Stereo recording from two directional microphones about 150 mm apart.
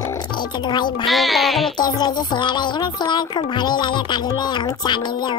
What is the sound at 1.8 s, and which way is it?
Speech, 30° left (ahead or behind).